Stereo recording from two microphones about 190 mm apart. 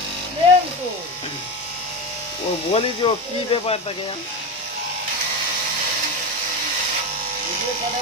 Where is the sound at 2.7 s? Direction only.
25° left (ahead or behind).